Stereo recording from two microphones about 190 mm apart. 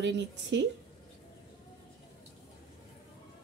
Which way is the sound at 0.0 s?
65° right (ahead or behind).